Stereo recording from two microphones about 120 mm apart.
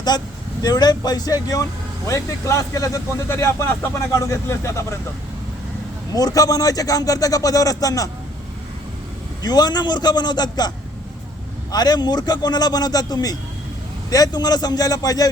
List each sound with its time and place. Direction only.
0.1 s a man's voice: 35° left (ahead or behind)
6.1 s speech: 30° left (ahead or behind)
9.4 s a man's voice: 35° left (ahead or behind)
11.7 s a man's voice: 35° left (ahead or behind)